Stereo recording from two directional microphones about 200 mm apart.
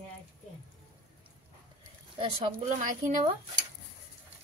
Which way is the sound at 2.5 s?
40° right (ahead or behind).